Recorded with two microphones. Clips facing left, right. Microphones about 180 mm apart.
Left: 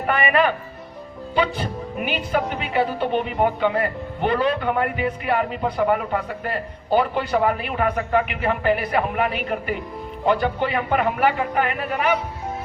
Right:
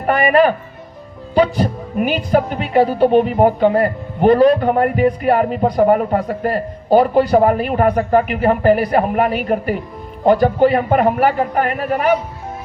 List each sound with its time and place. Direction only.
0.0 s a woman's voice: 40° right (ahead or behind)